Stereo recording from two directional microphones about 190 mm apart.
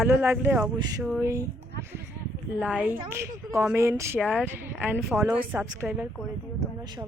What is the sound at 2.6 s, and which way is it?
A woman's voice, 5° right (ahead or behind).